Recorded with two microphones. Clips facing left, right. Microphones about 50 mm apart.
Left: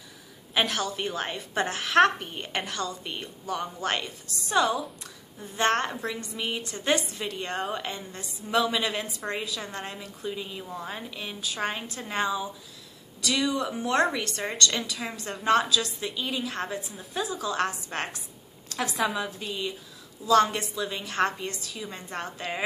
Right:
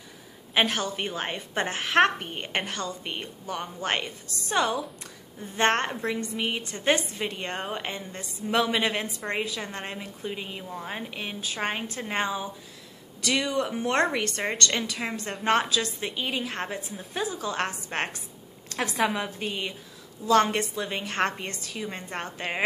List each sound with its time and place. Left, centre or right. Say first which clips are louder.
0.6 s a woman's voice: right 2 dB; right
4.6 s a woman's voice: left 1 dB; centre
5.6 s a woman's voice: right 1 dB; right
19.0 s a woman's voice: right 1 dB; right
19.3 s a woman's voice: right 1 dB; right